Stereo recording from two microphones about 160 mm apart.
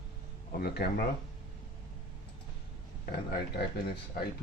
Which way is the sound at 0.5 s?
75° left (ahead or behind).